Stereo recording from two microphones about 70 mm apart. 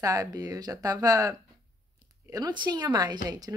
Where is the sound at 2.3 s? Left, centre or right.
Right.